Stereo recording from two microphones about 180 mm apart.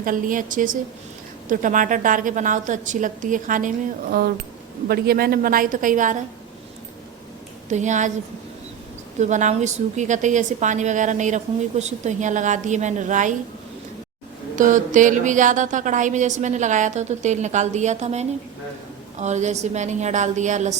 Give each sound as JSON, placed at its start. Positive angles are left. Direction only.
{"t": 0.0, "sound": "a woman's voice", "side_deg": -50}
{"t": 4.9, "sound": "a woman's voice", "side_deg": -55}
{"t": 7.7, "sound": "a woman's voice", "side_deg": -40}
{"t": 9.1, "sound": "a woman's voice", "side_deg": -40}
{"t": 14.5, "sound": "a woman's voice", "side_deg": -45}